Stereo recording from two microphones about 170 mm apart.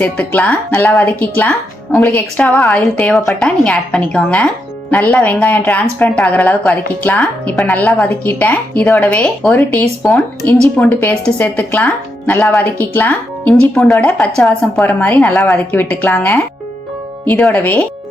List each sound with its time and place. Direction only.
0.0 s speech: 10° left (ahead or behind)